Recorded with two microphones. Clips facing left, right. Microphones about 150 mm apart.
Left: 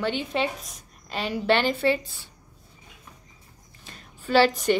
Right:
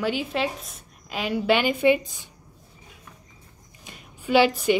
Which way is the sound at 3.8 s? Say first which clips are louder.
Right 3 dB; 10° right (ahead or behind).